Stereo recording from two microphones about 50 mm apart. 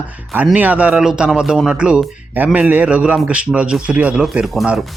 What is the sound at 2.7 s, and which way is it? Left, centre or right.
Speech, right.